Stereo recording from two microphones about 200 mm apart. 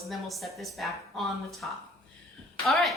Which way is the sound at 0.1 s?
Centre (ahead or behind).